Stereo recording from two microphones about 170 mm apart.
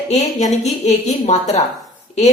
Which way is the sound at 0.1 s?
40° left (ahead or behind).